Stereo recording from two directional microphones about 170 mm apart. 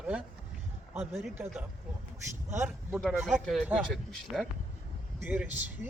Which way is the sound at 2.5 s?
15° right (ahead or behind).